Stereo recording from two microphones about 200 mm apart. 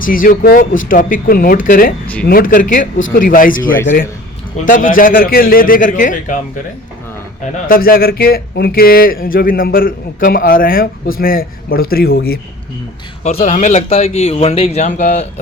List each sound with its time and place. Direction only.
0.0 s speech: 45° left (ahead or behind)
7.5 s speech: 45° left (ahead or behind)
13.2 s a man's voice: 35° left (ahead or behind)